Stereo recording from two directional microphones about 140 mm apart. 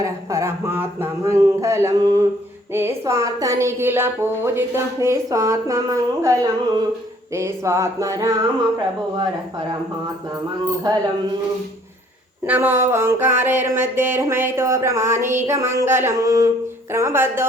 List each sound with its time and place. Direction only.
0.0 s a woman's voice: 20° right (ahead or behind)
12.5 s a woman's voice: 15° right (ahead or behind)